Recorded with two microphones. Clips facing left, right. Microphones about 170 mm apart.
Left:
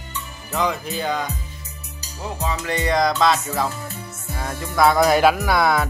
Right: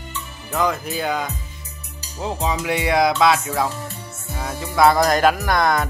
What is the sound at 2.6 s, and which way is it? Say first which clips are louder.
Music: right 1 dB; 10° right (ahead or behind).